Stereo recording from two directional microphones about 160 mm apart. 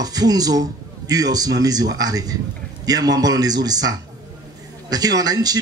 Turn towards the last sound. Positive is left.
turn(degrees=-25)  # may be behind; listen again after turning